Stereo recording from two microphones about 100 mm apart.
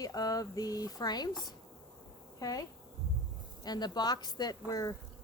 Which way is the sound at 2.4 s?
40° left (ahead or behind).